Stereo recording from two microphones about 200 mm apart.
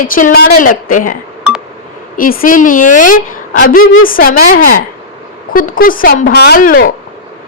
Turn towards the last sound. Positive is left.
turn(degrees=45)  # may be behind; listen again after turning